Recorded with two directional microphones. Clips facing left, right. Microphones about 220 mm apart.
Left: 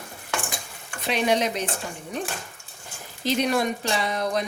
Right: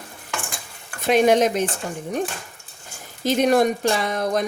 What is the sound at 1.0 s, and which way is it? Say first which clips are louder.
Speech: right 7 dB; 45° right (ahead or behind).